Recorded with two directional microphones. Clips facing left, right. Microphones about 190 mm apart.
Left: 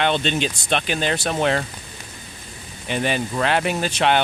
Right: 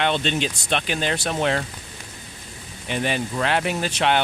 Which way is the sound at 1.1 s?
50° left (ahead or behind).